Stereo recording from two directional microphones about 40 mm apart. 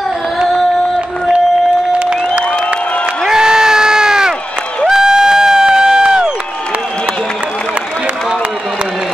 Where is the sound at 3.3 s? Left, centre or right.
Centre.